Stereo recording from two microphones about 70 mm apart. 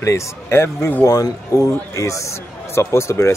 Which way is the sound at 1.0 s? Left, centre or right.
Left.